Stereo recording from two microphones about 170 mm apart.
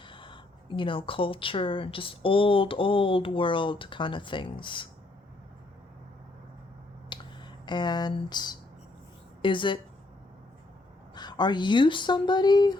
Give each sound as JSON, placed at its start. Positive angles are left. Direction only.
{"t": 0.0, "sound": "speech", "side_deg": 30}
{"t": 7.1, "sound": "a sound", "side_deg": 25}
{"t": 9.4, "sound": "speech", "side_deg": 30}
{"t": 11.1, "sound": "speech", "side_deg": 25}